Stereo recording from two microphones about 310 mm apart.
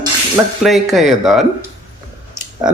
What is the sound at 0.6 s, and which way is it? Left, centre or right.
Speech, centre.